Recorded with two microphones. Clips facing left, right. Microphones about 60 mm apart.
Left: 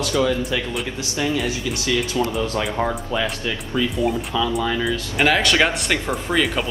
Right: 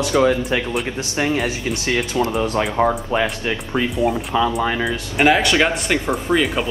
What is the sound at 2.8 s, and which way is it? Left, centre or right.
Speech, centre.